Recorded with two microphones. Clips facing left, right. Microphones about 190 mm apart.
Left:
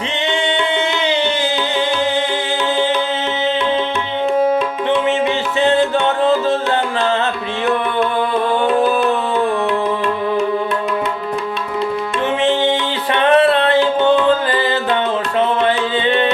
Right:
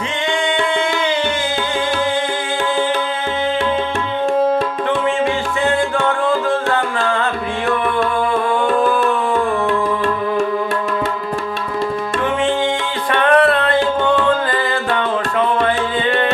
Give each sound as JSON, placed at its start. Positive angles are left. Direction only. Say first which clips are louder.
{"t": 5.6, "sound": "music", "louder": "left 3 dB", "side_deg": 25}
{"t": 8.6, "sound": "music", "louder": "left 1 dB", "side_deg": 20}
{"t": 13.1, "sound": "music", "louder": "left 1 dB", "side_deg": 20}
{"t": 15.4, "sound": "music", "louder": "left 1 dB", "side_deg": 25}